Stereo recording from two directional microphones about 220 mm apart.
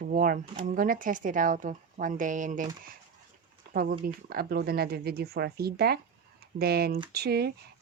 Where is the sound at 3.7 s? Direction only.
40° right (ahead or behind).